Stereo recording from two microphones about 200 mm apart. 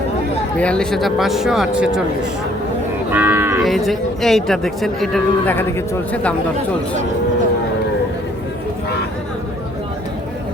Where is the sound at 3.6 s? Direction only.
Centre (ahead or behind).